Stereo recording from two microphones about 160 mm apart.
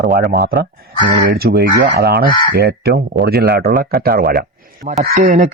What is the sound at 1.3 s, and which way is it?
Speech, 80° right.